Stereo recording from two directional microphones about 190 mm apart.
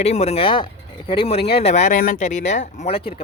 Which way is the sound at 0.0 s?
35° left (ahead or behind).